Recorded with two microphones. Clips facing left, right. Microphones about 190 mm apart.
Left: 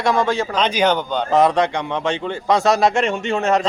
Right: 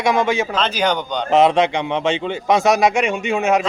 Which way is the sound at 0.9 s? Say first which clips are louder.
Left 2 dB; 5° left (ahead or behind).